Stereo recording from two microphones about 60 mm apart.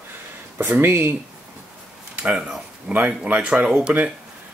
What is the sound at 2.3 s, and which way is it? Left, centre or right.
Speech, centre.